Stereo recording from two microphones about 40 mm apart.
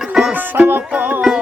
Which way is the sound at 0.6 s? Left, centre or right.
Right.